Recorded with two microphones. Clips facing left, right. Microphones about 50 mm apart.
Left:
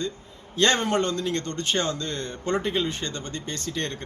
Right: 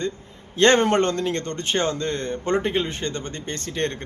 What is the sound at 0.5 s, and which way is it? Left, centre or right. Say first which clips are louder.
A man's voice: right 5 dB; right.